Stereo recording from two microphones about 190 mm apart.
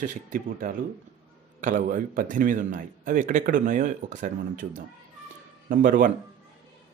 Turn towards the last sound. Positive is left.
turn(degrees=-45)  # may be behind; listen again after turning